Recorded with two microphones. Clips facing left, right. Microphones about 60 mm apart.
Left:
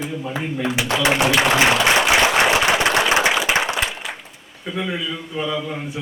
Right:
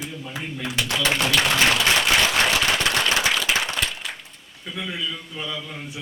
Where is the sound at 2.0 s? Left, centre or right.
Centre.